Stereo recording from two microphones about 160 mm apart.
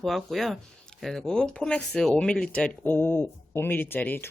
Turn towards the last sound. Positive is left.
turn(degrees=10)  # may be behind; listen again after turning